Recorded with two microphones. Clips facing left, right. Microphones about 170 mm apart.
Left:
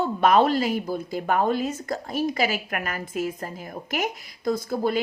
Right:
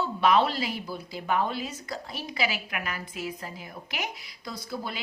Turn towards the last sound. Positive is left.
turn(degrees=50)  # may be behind; listen again after turning